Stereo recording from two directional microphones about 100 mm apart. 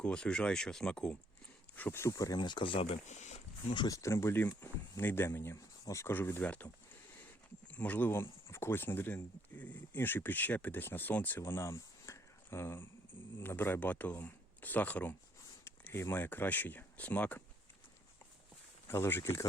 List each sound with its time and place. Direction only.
0.0 s speech: 10° left (ahead or behind)
1.7 s speech: 20° left (ahead or behind)
2.1 s speech: 40° left (ahead or behind); by 3.0 s 60° left (ahead or behind)
3.8 s speech: 30° left (ahead or behind); by 6.7 s 15° left (ahead or behind)
7.7 s speech: 15° left (ahead or behind)
18.9 s speech: 25° left (ahead or behind)